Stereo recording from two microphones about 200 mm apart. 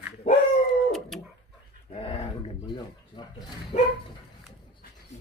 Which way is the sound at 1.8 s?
30° left (ahead or behind).